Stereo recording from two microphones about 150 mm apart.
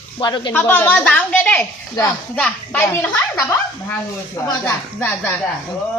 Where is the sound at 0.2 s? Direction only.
30° left (ahead or behind).